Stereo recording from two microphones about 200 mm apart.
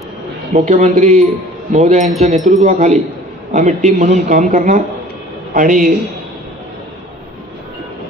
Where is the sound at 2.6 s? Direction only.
35° right (ahead or behind).